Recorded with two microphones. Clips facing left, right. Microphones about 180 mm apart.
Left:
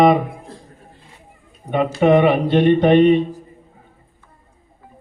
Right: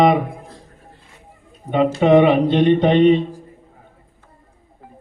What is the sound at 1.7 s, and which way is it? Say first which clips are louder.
Mantra: right 1 dB; 15° right (ahead or behind).